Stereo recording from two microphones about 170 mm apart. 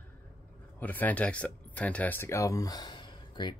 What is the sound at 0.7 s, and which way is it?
Speech, 10° left (ahead or behind).